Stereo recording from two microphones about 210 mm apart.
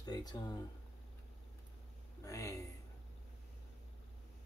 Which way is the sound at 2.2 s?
15° left (ahead or behind).